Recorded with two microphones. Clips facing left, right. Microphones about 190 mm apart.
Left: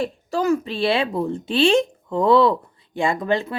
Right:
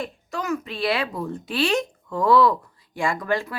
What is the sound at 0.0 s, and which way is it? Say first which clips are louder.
A woman's voice: left 8 dB; 30° left (ahead or behind).